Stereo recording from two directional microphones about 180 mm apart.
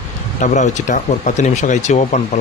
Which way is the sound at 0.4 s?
45° left (ahead or behind).